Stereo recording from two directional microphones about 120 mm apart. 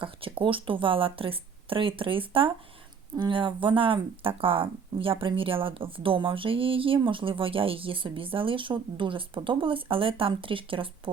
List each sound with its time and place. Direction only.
0.0 s speech: 50° right (ahead or behind)